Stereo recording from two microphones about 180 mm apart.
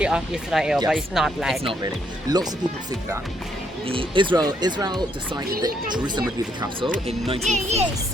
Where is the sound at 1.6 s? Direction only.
20° right (ahead or behind).